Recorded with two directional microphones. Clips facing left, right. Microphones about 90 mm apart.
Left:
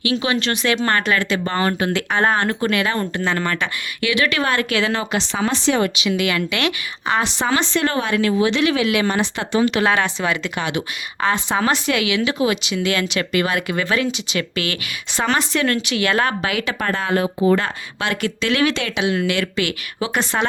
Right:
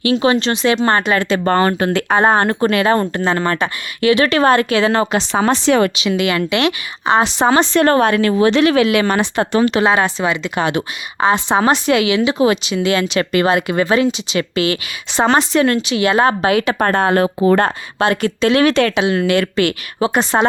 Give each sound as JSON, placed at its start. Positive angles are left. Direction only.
{"t": 0.0, "sound": "speech", "side_deg": -40}
{"t": 5.6, "sound": "speech", "side_deg": -75}
{"t": 6.0, "sound": "speech", "side_deg": -35}
{"t": 7.3, "sound": "speech", "side_deg": -40}
{"t": 9.7, "sound": "speech", "side_deg": -30}
{"t": 11.2, "sound": "speech", "side_deg": -20}
{"t": 18.0, "sound": "speech", "side_deg": -35}
{"t": 18.7, "sound": "speech", "side_deg": -55}
{"t": 18.9, "sound": "speech", "side_deg": -40}